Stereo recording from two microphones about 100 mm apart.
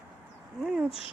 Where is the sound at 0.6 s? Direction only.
5° right (ahead or behind).